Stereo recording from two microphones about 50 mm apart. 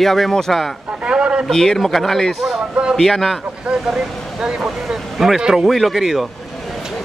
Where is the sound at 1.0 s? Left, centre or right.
Centre.